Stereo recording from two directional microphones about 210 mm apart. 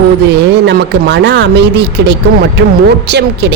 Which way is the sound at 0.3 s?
55° right (ahead or behind).